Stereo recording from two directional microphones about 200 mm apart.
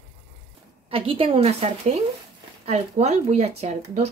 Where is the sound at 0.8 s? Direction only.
30° right (ahead or behind).